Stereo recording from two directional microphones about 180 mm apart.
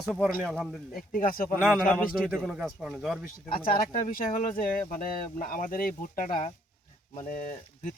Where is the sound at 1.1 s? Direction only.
50° left (ahead or behind).